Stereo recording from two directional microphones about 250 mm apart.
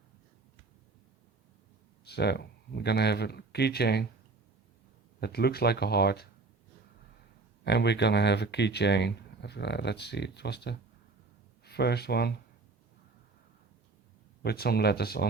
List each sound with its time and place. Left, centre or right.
2.0 s speech: left
5.2 s speech: left
7.6 s speech: left
14.4 s speech: left